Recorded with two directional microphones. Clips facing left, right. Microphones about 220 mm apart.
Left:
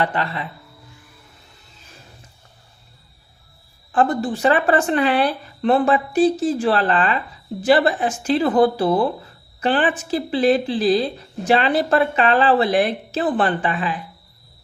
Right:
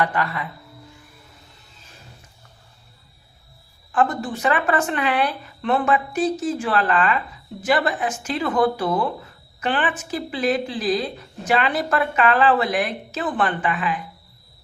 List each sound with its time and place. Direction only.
0.0 s speech: 25° left (ahead or behind)
3.9 s speech: 35° left (ahead or behind)